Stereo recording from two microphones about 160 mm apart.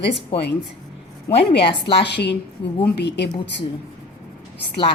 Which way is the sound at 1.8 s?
90° left.